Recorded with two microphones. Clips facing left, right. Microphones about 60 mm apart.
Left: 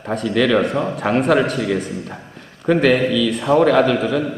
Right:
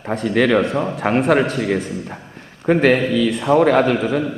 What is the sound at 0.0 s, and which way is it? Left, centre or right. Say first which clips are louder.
A man's voice: right 1 dB; right.